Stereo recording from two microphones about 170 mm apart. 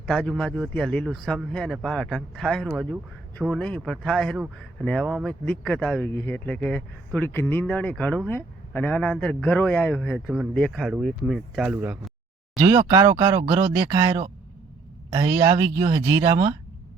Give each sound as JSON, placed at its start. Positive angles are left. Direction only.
{"t": 0.0, "sound": "a man's voice", "side_deg": 5}
{"t": 10.2, "sound": "a man's voice", "side_deg": -5}
{"t": 12.5, "sound": "speech", "side_deg": -25}
{"t": 13.2, "sound": "speech", "side_deg": -25}
{"t": 13.7, "sound": "speech", "side_deg": -15}
{"t": 15.4, "sound": "speech", "side_deg": -20}